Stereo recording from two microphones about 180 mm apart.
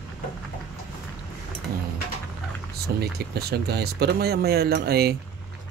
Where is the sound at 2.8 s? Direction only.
60° right (ahead or behind).